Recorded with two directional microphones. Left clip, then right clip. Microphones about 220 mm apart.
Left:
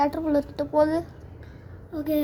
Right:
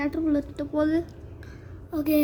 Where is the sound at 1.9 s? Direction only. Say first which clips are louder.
Right 2 dB; 40° right (ahead or behind).